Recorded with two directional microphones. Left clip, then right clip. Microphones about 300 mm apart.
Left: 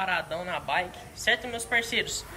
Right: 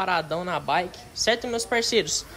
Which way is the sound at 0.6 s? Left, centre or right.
Right.